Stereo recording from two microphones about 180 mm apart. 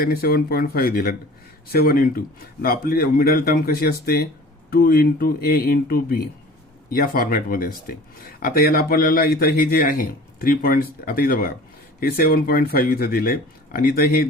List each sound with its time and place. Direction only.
0.0 s a man's voice: 55° left (ahead or behind)